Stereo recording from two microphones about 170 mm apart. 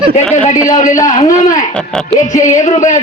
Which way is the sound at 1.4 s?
50° left (ahead or behind).